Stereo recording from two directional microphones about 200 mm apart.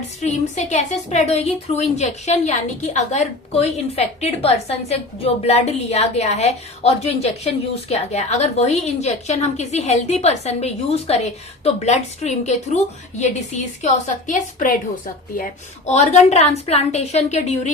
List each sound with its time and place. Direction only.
0.2 s a woman's voice: 35° left (ahead or behind)